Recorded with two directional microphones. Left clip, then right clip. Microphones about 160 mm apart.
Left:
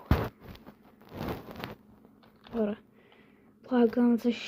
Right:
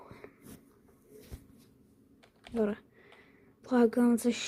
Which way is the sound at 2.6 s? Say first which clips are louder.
Even; 20° right (ahead or behind).